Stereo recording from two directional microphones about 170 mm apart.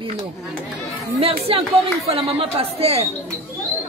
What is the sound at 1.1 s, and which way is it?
Speech, 35° right (ahead or behind).